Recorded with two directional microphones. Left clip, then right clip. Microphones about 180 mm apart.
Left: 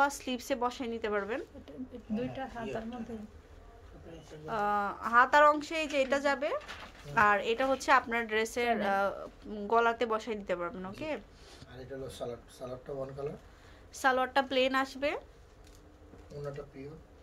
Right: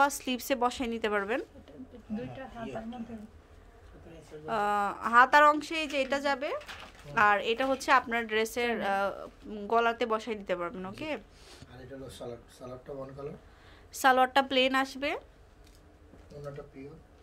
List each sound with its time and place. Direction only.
0.0 s a woman's voice: 20° right (ahead or behind)
1.7 s speech: 35° left (ahead or behind)
4.5 s a woman's voice: 20° right (ahead or behind); by 13.3 s centre (ahead or behind)
13.9 s a woman's voice: 25° right (ahead or behind)